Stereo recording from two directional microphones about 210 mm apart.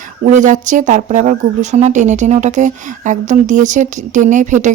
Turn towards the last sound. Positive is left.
turn(degrees=-35)  # may be behind; listen again after turning